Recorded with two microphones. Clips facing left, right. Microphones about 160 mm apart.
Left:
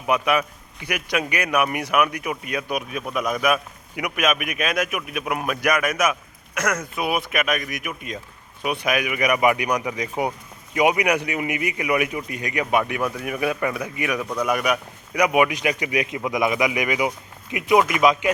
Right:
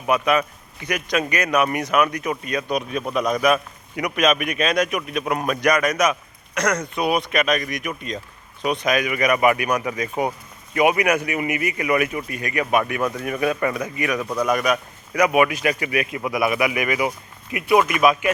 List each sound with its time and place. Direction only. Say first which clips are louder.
0.1 s a man's voice: right 2 dB; 10° left (ahead or behind)